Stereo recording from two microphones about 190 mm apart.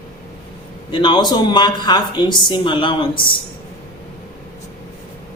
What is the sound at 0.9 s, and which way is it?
A man's voice, 25° left (ahead or behind).